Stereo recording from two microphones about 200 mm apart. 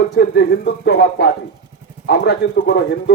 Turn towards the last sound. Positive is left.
turn(degrees=60)  # may be behind; listen again after turning